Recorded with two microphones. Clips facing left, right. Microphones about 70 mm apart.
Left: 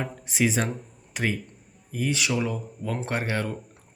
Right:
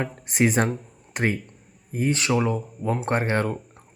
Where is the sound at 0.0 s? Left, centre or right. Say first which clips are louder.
Right 3 dB; right.